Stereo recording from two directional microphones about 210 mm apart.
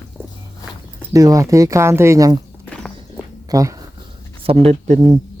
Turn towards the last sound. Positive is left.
turn(degrees=-30)  # may be behind; listen again after turning